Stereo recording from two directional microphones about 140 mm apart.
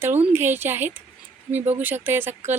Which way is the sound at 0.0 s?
15° right (ahead or behind).